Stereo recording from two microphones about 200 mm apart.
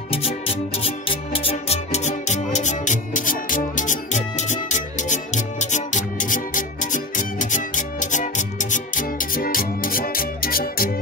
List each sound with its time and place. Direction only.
0.8 s music: 30° left (ahead or behind); by 10.9 s 50° left (ahead or behind)